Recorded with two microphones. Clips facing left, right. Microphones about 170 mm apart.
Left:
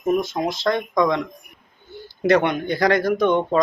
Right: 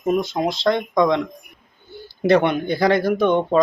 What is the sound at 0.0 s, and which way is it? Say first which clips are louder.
Speech: right 1 dB; 25° right (ahead or behind).